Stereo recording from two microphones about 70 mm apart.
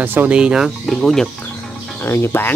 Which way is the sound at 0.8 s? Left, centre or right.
Centre.